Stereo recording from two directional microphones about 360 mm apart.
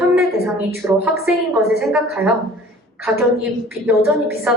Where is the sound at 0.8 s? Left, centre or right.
Centre.